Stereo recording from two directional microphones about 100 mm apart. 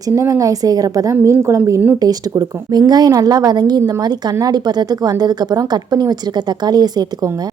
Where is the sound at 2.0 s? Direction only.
40° right (ahead or behind).